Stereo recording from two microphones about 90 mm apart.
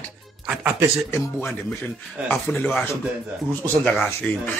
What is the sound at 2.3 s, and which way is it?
Speech, 20° left (ahead or behind).